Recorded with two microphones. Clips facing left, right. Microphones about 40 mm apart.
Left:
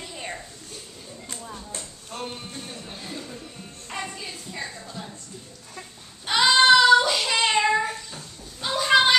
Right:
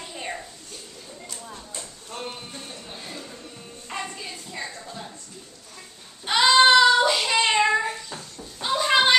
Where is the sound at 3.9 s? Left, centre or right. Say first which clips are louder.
Even; centre.